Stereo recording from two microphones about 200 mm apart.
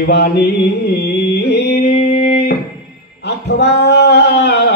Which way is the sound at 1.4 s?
55° left (ahead or behind).